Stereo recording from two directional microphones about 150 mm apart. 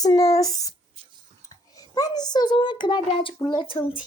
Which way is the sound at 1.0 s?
40° right (ahead or behind).